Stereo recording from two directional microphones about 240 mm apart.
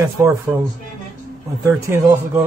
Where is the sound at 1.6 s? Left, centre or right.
Centre.